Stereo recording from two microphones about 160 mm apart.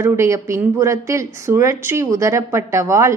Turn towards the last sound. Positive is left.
turn(degrees=-20)  # may be behind; listen again after turning